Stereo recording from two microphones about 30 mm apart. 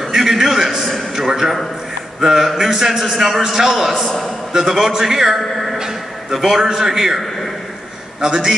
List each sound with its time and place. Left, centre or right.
0.3 s a sound: centre
1.1 s a man's voice: centre
8.2 s a man's voice: right